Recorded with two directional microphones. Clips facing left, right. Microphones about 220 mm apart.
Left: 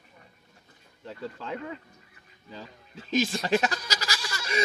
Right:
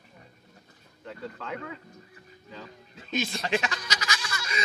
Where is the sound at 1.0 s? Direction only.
30° left (ahead or behind).